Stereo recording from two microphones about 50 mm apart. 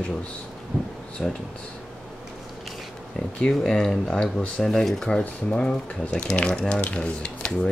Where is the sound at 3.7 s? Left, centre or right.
Centre.